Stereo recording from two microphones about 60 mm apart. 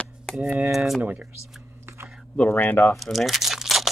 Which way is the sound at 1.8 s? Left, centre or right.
Right.